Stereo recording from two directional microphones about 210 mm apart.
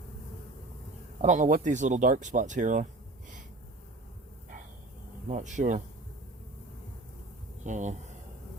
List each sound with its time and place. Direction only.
1.2 s speech: 35° right (ahead or behind)
5.3 s speech: 35° right (ahead or behind)
7.6 s speech: 35° right (ahead or behind)